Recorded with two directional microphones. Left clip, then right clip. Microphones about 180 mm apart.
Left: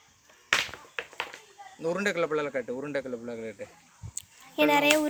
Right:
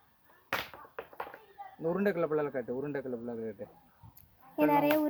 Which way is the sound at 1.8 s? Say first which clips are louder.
Left 3 dB; 45° right (ahead or behind).